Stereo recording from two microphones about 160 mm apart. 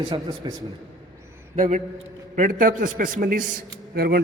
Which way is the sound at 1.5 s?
50° right (ahead or behind).